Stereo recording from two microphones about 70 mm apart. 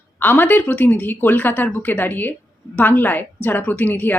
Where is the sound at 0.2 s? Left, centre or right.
Left.